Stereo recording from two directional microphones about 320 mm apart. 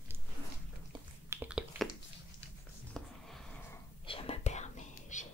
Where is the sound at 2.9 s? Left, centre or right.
Centre.